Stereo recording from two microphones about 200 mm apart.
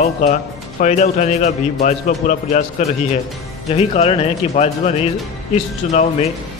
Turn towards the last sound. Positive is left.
turn(degrees=35)  # may be behind; listen again after turning